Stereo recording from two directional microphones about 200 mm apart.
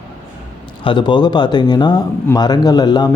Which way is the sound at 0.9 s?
25° left (ahead or behind).